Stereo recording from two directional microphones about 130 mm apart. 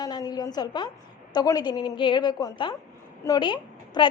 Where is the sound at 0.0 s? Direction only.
30° left (ahead or behind).